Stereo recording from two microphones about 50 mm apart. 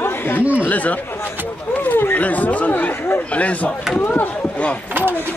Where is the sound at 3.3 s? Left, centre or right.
Left.